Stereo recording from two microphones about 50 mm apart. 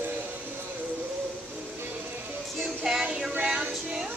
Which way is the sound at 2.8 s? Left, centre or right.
Centre.